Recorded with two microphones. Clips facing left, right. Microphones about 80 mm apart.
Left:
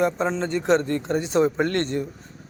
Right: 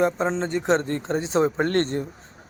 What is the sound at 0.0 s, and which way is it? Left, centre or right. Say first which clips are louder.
A man's voice: even; right.